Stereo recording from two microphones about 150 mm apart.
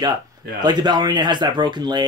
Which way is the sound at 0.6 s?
30° right (ahead or behind).